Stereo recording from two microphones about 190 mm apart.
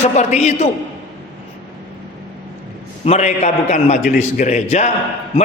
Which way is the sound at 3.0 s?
35° left (ahead or behind).